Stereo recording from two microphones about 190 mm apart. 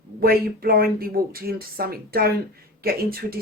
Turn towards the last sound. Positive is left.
turn(degrees=-50)  # may be behind; listen again after turning